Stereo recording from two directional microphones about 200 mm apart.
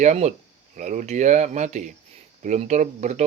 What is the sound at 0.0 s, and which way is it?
Speech, 35° right (ahead or behind).